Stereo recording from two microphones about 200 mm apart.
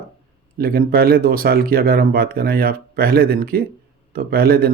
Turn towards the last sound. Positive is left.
turn(degrees=-50)  # may be behind; listen again after turning